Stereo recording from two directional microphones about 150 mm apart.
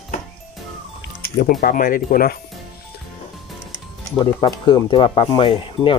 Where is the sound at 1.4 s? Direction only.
75° left (ahead or behind).